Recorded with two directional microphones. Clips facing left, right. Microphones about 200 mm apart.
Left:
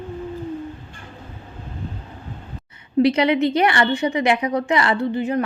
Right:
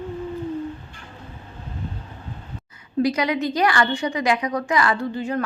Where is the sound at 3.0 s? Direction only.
25° left (ahead or behind).